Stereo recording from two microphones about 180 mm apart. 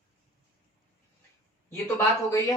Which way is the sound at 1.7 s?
15° left (ahead or behind).